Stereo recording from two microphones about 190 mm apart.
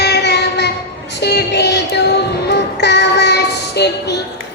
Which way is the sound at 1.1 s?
60° left (ahead or behind).